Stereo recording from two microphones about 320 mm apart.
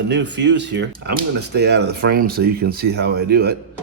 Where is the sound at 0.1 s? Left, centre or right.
Right.